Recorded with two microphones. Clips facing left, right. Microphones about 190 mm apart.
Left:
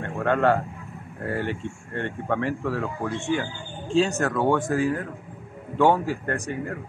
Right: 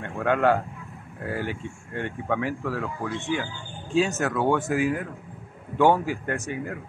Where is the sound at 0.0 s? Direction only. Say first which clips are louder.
Left 1 dB; 5° right (ahead or behind).